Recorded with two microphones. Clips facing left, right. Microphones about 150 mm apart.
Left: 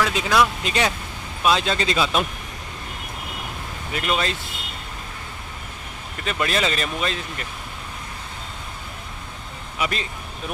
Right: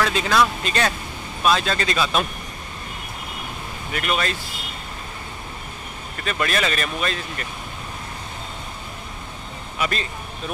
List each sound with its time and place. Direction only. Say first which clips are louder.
0.0 s speech: even; 10° left (ahead or behind)
3.9 s speech: even; 25° left (ahead or behind)
6.2 s speech: even; 20° left (ahead or behind)
9.8 s speech: right 1 dB; 15° left (ahead or behind)